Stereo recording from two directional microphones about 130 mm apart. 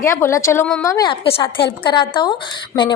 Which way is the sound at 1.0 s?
40° left (ahead or behind).